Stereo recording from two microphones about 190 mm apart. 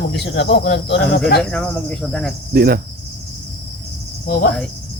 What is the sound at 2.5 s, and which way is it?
Speech, 55° right (ahead or behind).